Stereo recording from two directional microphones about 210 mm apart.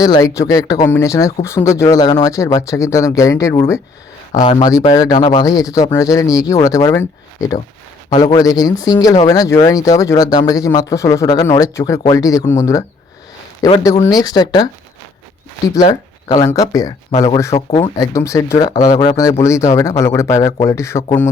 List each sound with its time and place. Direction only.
0.0 s speech: 15° left (ahead or behind)
14.0 s speech: 20° left (ahead or behind)